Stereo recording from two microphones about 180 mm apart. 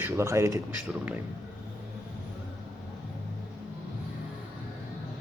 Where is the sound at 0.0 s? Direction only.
15° right (ahead or behind).